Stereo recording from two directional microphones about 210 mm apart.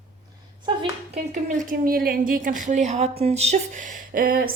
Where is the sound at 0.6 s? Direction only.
25° right (ahead or behind).